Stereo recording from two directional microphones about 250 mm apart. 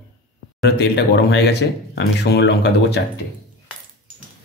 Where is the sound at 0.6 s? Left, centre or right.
Left.